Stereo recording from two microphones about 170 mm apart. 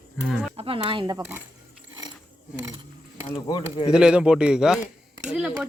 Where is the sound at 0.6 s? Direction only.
35° right (ahead or behind).